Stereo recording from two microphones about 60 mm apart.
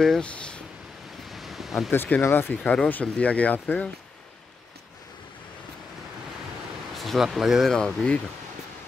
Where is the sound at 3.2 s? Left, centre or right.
Left.